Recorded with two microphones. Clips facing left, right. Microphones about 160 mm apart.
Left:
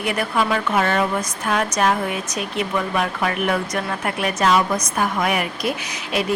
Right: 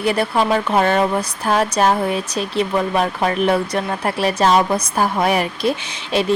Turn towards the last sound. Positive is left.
turn(degrees=-30)  # may be behind; listen again after turning